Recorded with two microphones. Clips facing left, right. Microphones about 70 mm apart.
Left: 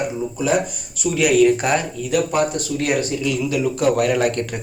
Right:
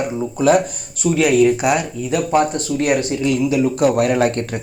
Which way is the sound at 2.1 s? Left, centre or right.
Right.